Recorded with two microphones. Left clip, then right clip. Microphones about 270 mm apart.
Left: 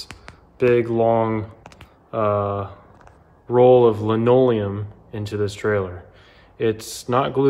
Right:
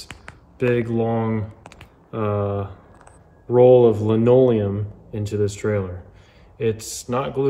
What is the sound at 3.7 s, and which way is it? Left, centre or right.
Speech, right.